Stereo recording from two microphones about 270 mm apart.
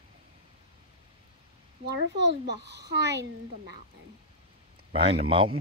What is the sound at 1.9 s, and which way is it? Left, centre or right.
A child's voice, right.